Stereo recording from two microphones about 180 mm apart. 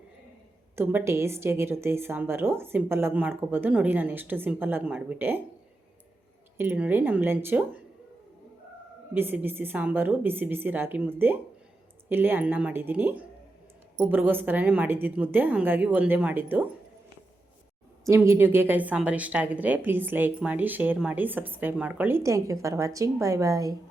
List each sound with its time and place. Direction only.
0.8 s a woman's voice: 15° right (ahead or behind)
6.6 s a woman's voice: 10° right (ahead or behind)
9.1 s a woman's voice: 10° right (ahead or behind)
18.0 s a woman's voice: 15° right (ahead or behind)